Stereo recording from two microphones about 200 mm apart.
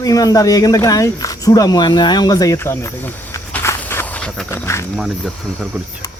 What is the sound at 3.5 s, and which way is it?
Walk, 10° left (ahead or behind).